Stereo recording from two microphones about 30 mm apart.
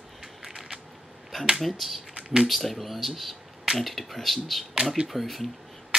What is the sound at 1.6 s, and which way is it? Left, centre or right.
Speech, centre.